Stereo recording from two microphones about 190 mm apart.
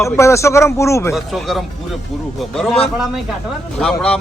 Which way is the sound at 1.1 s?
Centre (ahead or behind).